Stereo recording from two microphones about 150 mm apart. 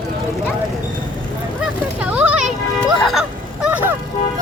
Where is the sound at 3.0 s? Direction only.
Centre (ahead or behind).